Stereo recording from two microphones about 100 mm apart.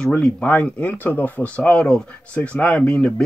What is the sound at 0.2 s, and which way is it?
Speech, 10° left (ahead or behind).